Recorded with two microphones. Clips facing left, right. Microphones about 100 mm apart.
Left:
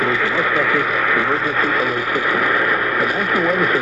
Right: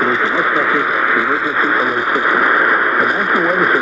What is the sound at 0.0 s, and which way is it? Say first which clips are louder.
Speech: right 3 dB; 25° right (ahead or behind).